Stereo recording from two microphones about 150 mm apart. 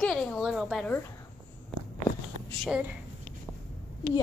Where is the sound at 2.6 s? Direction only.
5° right (ahead or behind).